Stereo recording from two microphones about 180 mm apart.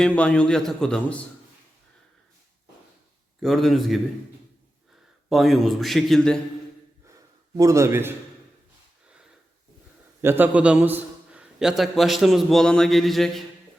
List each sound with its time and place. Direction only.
0.0 s a man's voice: 5° left (ahead or behind)
3.4 s a man's voice: centre (ahead or behind)
5.3 s a man's voice: centre (ahead or behind)
7.5 s a man's voice: 20° right (ahead or behind)
10.2 s a man's voice: 10° right (ahead or behind)